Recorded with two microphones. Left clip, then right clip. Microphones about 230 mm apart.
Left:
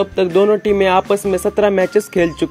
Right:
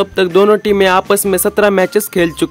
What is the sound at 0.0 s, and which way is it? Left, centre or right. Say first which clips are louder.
Speech: right 3 dB; centre.